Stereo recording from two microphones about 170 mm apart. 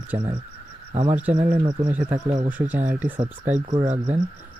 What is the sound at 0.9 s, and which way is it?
A man's voice, 40° right (ahead or behind).